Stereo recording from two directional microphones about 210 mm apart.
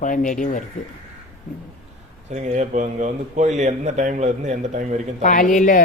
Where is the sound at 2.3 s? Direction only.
35° right (ahead or behind).